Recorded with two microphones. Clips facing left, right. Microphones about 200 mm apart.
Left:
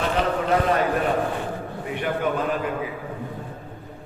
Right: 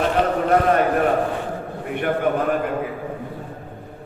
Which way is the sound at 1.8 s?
55° right (ahead or behind).